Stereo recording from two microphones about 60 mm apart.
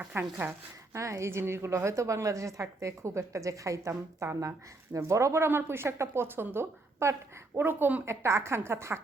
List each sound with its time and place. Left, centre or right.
0.0 s speech: right
0.9 s a woman's voice: right
7.0 s speech: right
7.6 s speech: right
8.0 s speech: right